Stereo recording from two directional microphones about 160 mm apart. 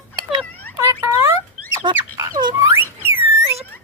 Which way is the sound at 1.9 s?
20° right (ahead or behind).